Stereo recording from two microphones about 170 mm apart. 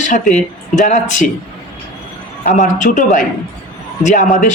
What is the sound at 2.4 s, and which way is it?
Speech, 50° left (ahead or behind).